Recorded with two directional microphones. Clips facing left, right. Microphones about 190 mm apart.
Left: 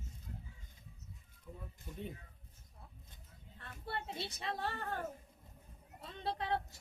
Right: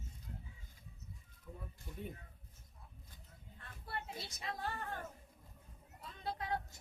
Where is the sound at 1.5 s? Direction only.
5° left (ahead or behind).